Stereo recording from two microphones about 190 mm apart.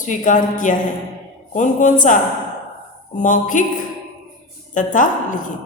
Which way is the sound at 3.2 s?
40° left (ahead or behind).